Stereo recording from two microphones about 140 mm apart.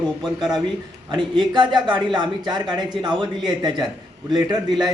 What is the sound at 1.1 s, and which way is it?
A man's voice, 35° right (ahead or behind).